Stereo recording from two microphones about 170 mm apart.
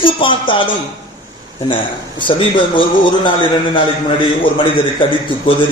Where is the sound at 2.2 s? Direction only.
30° left (ahead or behind).